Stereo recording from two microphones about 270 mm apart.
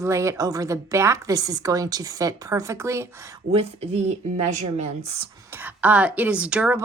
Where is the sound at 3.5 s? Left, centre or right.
Right.